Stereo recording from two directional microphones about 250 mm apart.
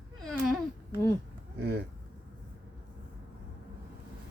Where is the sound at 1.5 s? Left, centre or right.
Right.